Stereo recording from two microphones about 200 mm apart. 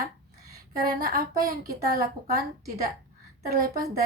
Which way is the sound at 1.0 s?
45° right (ahead or behind).